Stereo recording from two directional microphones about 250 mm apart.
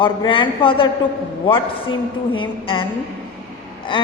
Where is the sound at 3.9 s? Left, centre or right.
Centre.